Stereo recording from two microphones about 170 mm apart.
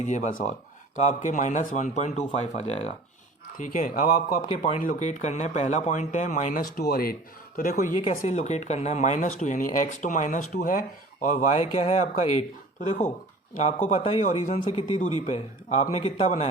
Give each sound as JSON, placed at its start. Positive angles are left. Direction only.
{"t": 0.0, "sound": "speech", "side_deg": 45}
{"t": 3.6, "sound": "speech", "side_deg": 50}
{"t": 4.4, "sound": "a man's voice", "side_deg": 40}